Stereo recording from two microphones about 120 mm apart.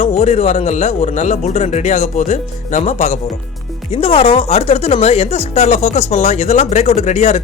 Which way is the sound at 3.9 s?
55° left (ahead or behind).